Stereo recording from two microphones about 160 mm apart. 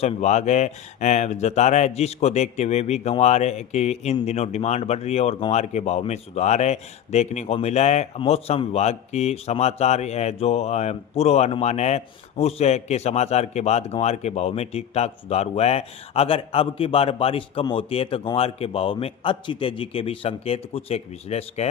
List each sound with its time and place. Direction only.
0.0 s speech: 45° left (ahead or behind)